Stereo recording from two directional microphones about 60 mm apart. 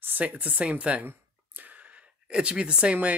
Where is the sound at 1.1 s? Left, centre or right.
Right.